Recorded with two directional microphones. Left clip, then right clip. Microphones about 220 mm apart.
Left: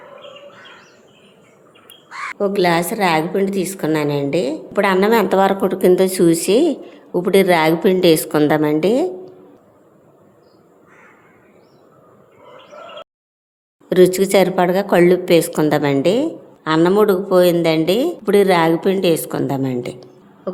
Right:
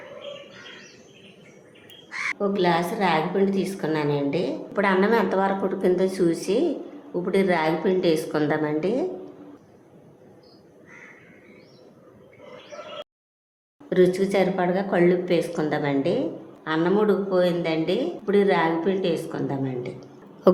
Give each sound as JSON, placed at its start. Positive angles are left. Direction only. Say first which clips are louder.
{"t": 2.4, "sound": "a woman's voice", "louder": "left 7 dB", "side_deg": 45}
{"t": 13.9, "sound": "speech", "louder": "left 8 dB", "side_deg": 40}